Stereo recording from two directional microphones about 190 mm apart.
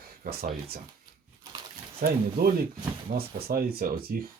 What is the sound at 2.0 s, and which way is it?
Speech, 50° right (ahead or behind).